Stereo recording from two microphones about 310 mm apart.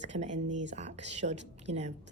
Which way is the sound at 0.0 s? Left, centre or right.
Right.